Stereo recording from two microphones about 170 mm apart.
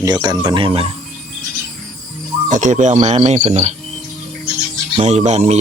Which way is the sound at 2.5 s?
45° right (ahead or behind).